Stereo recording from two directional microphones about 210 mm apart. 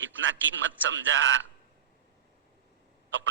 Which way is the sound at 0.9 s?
65° right (ahead or behind).